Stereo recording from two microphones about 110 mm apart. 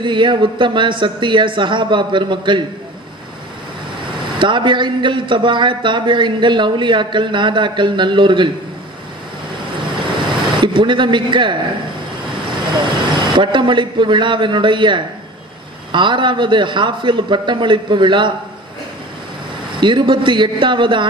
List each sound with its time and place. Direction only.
0.0 s a man's voice: 45° right (ahead or behind)
4.0 s a man's voice: 50° right (ahead or behind)
9.8 s a sound: 45° right (ahead or behind)
12.8 s a man's voice: 45° right (ahead or behind)
19.8 s a man's voice: 45° right (ahead or behind)